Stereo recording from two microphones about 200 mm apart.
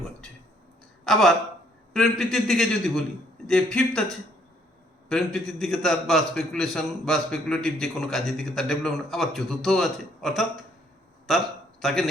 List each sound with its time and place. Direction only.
1.0 s a man's voice: centre (ahead or behind)
5.0 s a man's voice: centre (ahead or behind)
11.8 s a man's voice: centre (ahead or behind)